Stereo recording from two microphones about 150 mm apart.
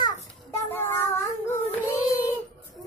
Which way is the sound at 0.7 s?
15° left (ahead or behind).